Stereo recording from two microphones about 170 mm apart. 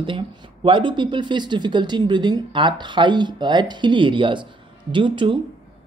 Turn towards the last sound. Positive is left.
turn(degrees=-30)  # may be behind; listen again after turning